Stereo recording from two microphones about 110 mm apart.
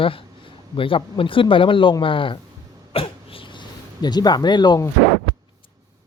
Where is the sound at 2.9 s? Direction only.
60° left (ahead or behind).